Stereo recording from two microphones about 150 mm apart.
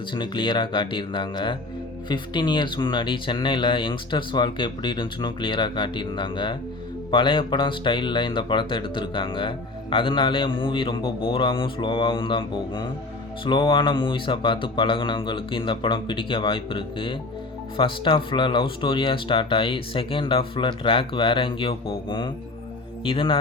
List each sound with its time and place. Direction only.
0.1 s speech: 30° left (ahead or behind)